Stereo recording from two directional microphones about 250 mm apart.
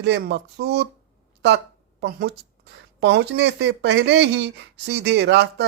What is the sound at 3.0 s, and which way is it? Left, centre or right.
Speech, right.